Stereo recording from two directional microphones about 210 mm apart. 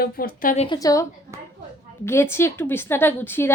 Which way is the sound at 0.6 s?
20° left (ahead or behind).